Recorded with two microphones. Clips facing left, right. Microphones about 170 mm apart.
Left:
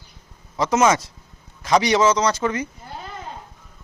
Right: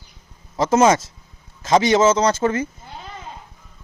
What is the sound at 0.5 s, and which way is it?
A man's voice, 30° right (ahead or behind).